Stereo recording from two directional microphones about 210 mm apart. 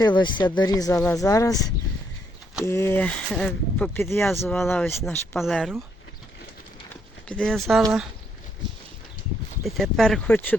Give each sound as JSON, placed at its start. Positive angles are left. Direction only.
{"t": 0.0, "sound": "speech", "side_deg": 20}
{"t": 5.4, "sound": "speech", "side_deg": 0}
{"t": 6.9, "sound": "horse", "side_deg": 5}
{"t": 9.6, "sound": "speech", "side_deg": 0}